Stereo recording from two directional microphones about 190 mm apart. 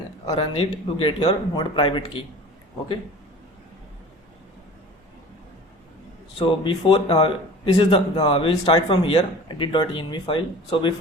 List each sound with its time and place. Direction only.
0.3 s speech: 25° left (ahead or behind)
6.4 s speech: 25° left (ahead or behind)